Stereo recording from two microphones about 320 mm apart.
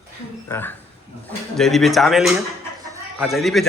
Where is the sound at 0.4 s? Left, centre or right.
Centre.